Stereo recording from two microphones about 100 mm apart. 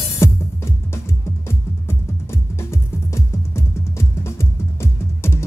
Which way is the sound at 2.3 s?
25° left (ahead or behind).